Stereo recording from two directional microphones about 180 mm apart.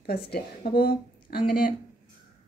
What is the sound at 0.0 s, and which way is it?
A woman's voice, 60° left (ahead or behind).